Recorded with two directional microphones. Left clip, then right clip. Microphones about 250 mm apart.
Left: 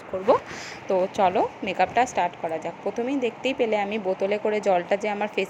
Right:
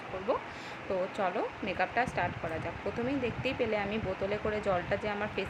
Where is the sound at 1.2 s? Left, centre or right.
Left.